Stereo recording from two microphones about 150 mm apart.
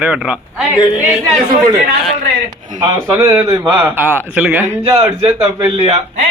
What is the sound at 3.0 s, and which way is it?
Speech, 20° right (ahead or behind).